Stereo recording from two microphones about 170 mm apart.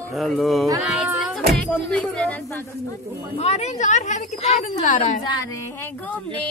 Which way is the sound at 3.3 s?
40° left (ahead or behind).